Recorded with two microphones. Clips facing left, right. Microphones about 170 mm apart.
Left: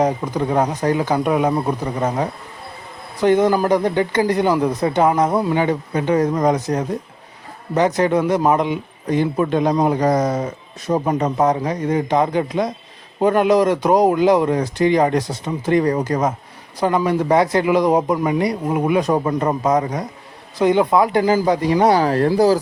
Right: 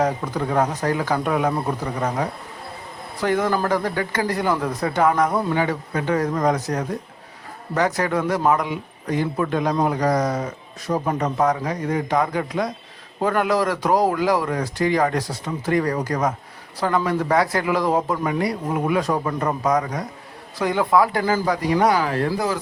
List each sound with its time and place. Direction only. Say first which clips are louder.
0.0 s speech: left 3 dB; 20° left (ahead or behind)